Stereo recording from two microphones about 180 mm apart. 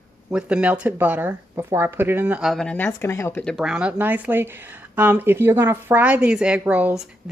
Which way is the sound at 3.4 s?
5° left (ahead or behind).